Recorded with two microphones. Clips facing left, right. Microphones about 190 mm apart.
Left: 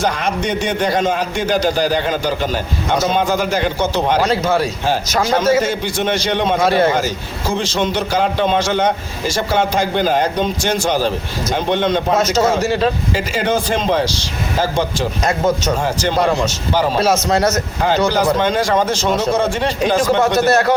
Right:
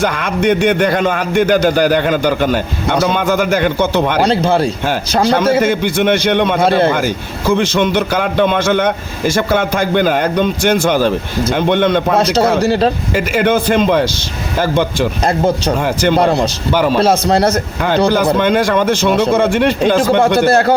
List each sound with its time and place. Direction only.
0.0 s a man's voice: 60° right (ahead or behind)
4.3 s speech: 30° right (ahead or behind)
5.4 s a man's voice: 55° right (ahead or behind)
6.7 s speech: 30° right (ahead or behind)
6.9 s a man's voice: 55° right (ahead or behind)
12.1 s speech: 35° right (ahead or behind)
13.1 s a man's voice: 55° right (ahead or behind)
15.2 s speech: 30° right (ahead or behind)
15.8 s a man's voice: 60° right (ahead or behind)
16.2 s speech: 35° right (ahead or behind)
17.7 s a man's voice: 60° right (ahead or behind)
20.5 s speech: 30° right (ahead or behind)